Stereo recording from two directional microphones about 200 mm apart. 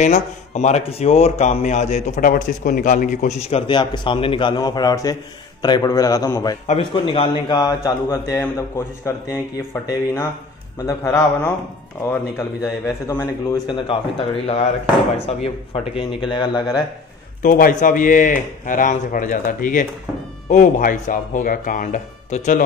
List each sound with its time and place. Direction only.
0.0 s a man's voice: 35° left (ahead or behind); by 9.4 s 15° left (ahead or behind)
10.9 s a man's voice: 10° left (ahead or behind)
13.7 s speech: 25° left (ahead or behind)
17.4 s speech: 45° left (ahead or behind)